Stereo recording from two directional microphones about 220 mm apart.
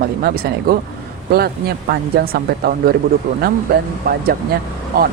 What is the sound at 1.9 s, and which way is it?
Speech, 45° right (ahead or behind).